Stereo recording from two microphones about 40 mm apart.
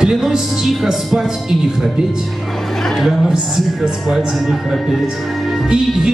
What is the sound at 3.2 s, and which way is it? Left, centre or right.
Speech, centre.